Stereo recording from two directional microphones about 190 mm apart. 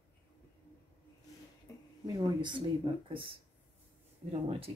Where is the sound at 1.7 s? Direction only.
20° left (ahead or behind).